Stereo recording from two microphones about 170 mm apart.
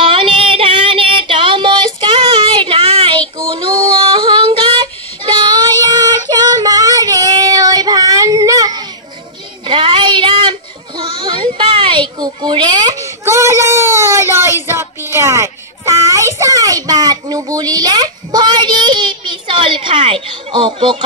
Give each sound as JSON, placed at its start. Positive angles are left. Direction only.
{"t": 0.0, "sound": "female singing", "side_deg": -30}
{"t": 5.4, "sound": "child singing", "side_deg": -25}
{"t": 11.0, "sound": "a sound", "side_deg": -30}